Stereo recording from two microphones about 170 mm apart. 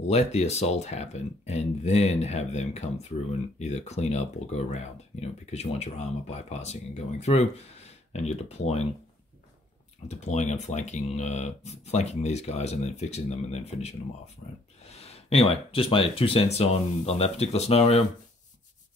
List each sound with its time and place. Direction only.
0.0 s speech: 40° left (ahead or behind)
10.0 s speech: 45° left (ahead or behind)